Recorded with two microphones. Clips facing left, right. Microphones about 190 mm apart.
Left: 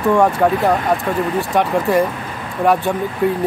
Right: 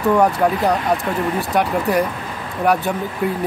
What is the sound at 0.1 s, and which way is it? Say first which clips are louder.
Speech: left 2 dB; centre (ahead or behind).